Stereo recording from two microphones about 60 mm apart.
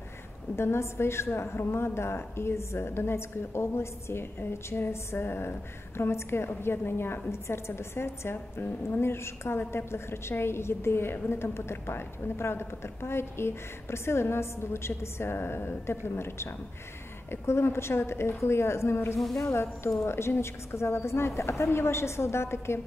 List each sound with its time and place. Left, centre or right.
0.6 s a woman's voice: left
19.1 s speech: centre
20.1 s a woman's voice: left